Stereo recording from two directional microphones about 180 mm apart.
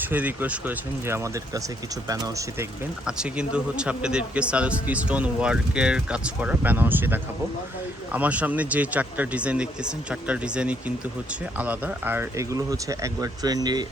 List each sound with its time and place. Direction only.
0.0 s a man's voice: 10° right (ahead or behind)
3.1 s a man's voice: 5° right (ahead or behind); by 13.8 s 20° right (ahead or behind)